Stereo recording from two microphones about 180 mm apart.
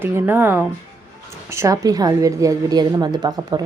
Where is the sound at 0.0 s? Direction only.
10° right (ahead or behind).